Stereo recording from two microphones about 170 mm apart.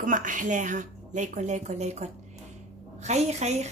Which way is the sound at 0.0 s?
50° right (ahead or behind).